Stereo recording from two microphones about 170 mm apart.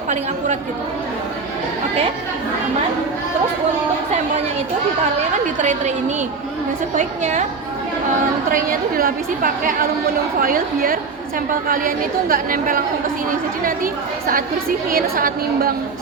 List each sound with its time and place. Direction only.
6.9 s a woman's voice: 45° right (ahead or behind)
8.5 s a woman's voice: 55° right (ahead or behind)